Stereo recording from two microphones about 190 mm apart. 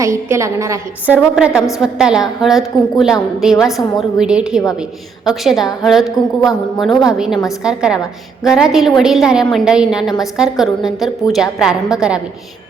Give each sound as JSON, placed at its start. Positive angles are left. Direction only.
{"t": 0.0, "sound": "a woman's voice", "side_deg": -15}
{"t": 1.2, "sound": "a woman's voice", "side_deg": -5}
{"t": 6.4, "sound": "a woman's voice", "side_deg": 20}
{"t": 6.8, "sound": "a woman's voice", "side_deg": -5}